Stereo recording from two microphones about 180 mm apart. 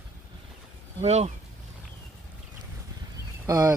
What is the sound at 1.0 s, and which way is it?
Speech, 40° right (ahead or behind).